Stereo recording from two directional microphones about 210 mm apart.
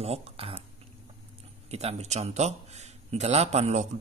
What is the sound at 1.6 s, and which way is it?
A man's voice, 30° right (ahead or behind).